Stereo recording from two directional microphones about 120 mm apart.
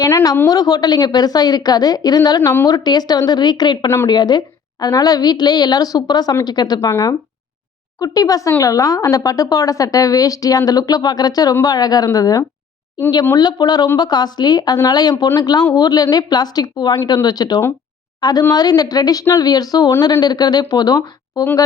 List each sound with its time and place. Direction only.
0.0 s a woman's voice: 30° left (ahead or behind)
3.8 s a woman's voice: 25° left (ahead or behind)
4.1 s a woman's voice: 35° left (ahead or behind)